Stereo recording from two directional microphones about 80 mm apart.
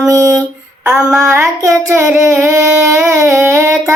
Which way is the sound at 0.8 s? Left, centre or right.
Centre.